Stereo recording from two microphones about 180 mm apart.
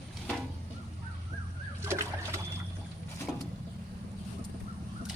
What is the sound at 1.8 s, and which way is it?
Boat, 15° right (ahead or behind).